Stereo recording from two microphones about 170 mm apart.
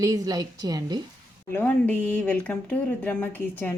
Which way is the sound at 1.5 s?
10° left (ahead or behind).